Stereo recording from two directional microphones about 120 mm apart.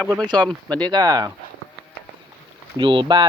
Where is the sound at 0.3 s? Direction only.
10° left (ahead or behind).